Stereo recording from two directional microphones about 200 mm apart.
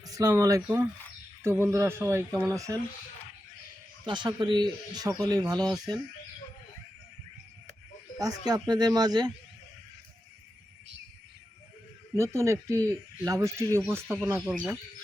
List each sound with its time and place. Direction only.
0.0 s speech: 15° right (ahead or behind)
4.0 s speech: 25° right (ahead or behind)
8.2 s speech: 20° right (ahead or behind)
12.1 s speech: 15° right (ahead or behind)